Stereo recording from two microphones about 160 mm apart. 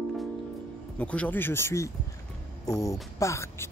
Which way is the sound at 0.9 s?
10° left (ahead or behind).